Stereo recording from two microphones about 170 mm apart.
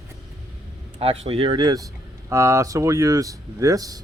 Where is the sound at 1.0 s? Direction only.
35° right (ahead or behind); by 4.0 s 20° right (ahead or behind).